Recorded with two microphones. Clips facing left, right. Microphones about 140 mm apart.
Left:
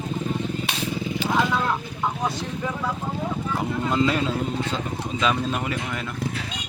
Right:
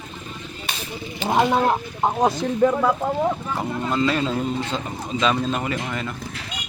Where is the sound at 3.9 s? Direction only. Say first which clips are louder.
Right 1 dB; 15° left (ahead or behind).